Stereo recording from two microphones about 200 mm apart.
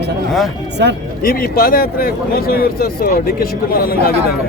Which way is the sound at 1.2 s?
45° left (ahead or behind).